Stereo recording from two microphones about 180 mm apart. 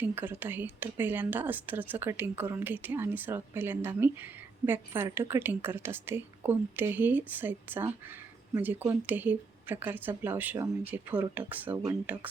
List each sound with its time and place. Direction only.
0.0 s a woman's voice: 10° right (ahead or behind)